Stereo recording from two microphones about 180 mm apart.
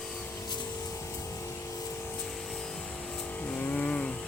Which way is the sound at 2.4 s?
5° left (ahead or behind).